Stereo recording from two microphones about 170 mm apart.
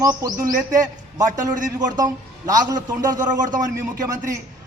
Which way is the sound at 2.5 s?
20° right (ahead or behind).